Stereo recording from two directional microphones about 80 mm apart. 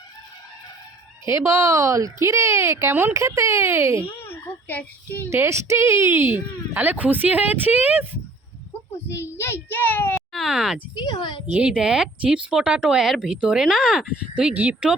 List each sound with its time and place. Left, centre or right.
1.2 s speech: right
4.0 s a child's voice: left
5.3 s speech: right
9.3 s a child's voice: left
10.3 s speech: centre
10.9 s a woman's voice: left
11.5 s speech: centre